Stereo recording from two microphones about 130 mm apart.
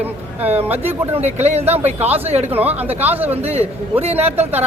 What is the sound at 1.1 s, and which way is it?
Speech, 60° right (ahead or behind).